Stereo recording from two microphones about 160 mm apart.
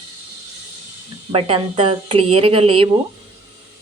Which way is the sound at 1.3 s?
35° right (ahead or behind).